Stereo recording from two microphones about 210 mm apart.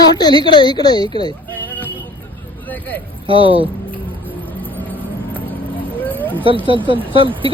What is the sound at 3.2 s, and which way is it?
Speech, 25° right (ahead or behind).